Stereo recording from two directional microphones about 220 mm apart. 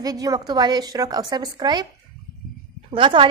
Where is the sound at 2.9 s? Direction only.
20° right (ahead or behind).